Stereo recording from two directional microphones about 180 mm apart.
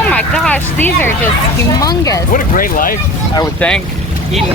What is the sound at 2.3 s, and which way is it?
Speech, 50° left (ahead or behind).